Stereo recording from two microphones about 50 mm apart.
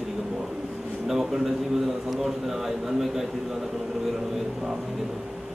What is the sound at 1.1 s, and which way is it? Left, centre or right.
Speech, centre.